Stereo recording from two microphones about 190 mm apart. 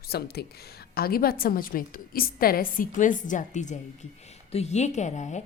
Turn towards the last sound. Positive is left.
turn(degrees=40)  # may be behind; listen again after turning